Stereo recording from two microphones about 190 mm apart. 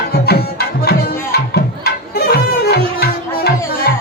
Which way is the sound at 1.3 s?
55° left (ahead or behind).